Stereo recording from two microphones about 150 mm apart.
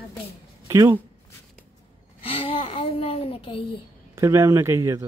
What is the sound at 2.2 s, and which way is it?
Speech, 40° left (ahead or behind).